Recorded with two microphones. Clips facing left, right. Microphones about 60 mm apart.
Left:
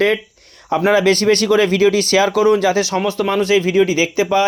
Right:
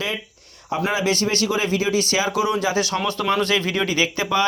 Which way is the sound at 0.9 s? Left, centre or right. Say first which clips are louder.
Left 9 dB; left.